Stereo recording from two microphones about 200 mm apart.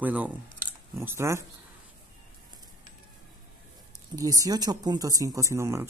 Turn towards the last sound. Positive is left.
turn(degrees=-15)  # may be behind; listen again after turning